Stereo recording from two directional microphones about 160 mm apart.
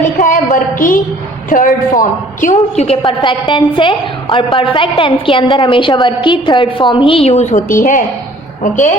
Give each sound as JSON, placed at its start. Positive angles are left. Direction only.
{"t": 0.2, "sound": "a sound", "side_deg": 55}
{"t": 1.5, "sound": "a woman's voice", "side_deg": 55}
{"t": 3.0, "sound": "a woman's voice", "side_deg": 30}